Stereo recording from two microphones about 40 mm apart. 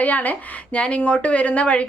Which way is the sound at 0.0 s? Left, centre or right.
Left.